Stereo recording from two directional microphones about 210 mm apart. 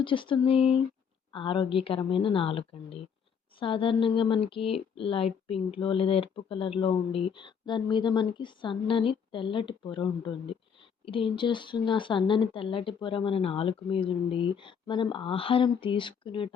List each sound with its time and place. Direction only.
0.0 s speech: 25° left (ahead or behind)